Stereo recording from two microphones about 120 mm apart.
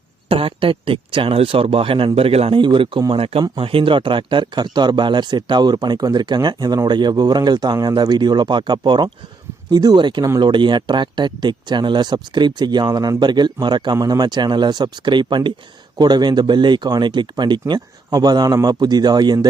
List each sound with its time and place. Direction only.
0.3 s speech: 50° right (ahead or behind)